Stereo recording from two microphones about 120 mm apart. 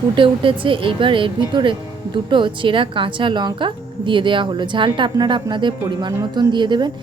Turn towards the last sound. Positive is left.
turn(degrees=-40)  # may be behind; listen again after turning